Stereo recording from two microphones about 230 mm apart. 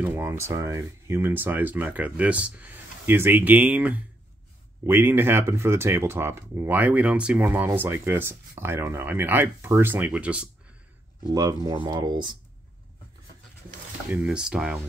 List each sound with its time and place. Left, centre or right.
0.1 s speech: centre
14.1 s speech: centre